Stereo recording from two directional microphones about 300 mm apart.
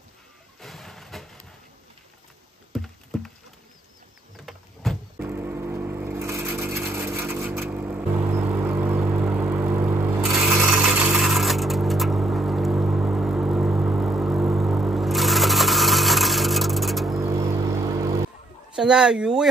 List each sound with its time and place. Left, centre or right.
0.6 s a sound: centre
3.1 s rodents: centre
4.5 s music: centre
18.8 s speech: centre